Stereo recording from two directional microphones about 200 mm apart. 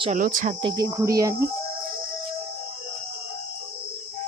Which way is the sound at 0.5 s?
25° right (ahead or behind).